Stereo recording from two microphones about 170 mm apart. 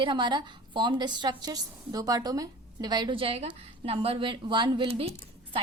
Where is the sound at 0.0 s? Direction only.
30° right (ahead or behind).